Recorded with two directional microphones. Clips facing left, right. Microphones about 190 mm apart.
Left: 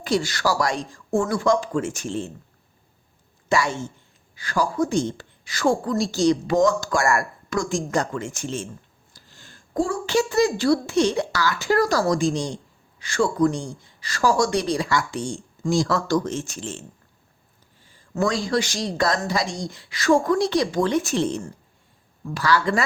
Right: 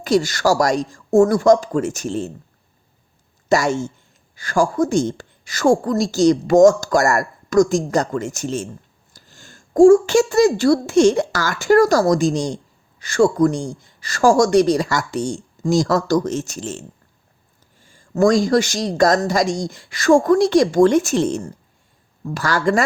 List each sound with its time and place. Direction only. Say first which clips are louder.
0.0 s speech: right 6 dB; 40° right (ahead or behind)
3.5 s a woman's voice: right 5 dB; 45° right (ahead or behind)
18.1 s a woman's voice: right 8 dB; 45° right (ahead or behind)